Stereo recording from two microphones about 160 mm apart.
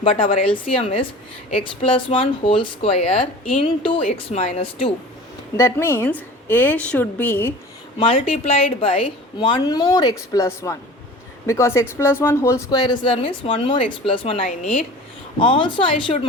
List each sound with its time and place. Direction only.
0.0 s speech: 35° left (ahead or behind)
5.5 s a woman's voice: 15° left (ahead or behind)
7.9 s speech: 35° left (ahead or behind)